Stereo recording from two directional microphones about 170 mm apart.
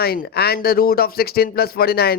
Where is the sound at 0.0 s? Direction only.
65° left (ahead or behind).